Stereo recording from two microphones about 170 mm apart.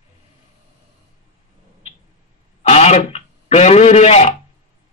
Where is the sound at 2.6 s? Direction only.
40° left (ahead or behind).